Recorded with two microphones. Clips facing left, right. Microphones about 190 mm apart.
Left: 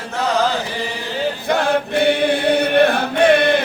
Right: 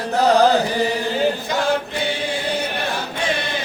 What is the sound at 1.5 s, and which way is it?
Choir, 60° left (ahead or behind).